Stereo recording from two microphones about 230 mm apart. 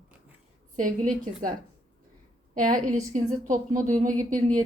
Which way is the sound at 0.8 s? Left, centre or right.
Right.